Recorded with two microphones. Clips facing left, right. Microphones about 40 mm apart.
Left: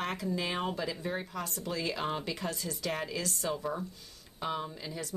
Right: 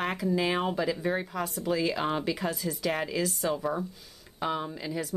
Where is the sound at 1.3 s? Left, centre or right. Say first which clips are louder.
Right 7 dB; centre.